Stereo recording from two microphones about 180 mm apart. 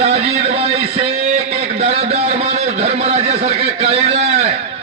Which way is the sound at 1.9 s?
35° right (ahead or behind).